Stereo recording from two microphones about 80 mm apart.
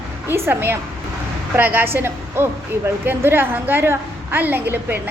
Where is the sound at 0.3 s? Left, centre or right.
Right.